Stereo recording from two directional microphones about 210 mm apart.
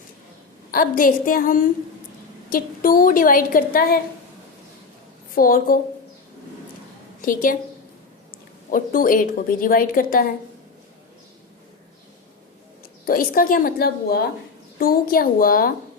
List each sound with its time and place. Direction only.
0.7 s a woman's voice: 40° left (ahead or behind)
5.3 s a woman's voice: 45° left (ahead or behind)
7.2 s a woman's voice: 40° left (ahead or behind)
8.7 s a woman's voice: 40° left (ahead or behind)
13.1 s a woman's voice: 45° left (ahead or behind)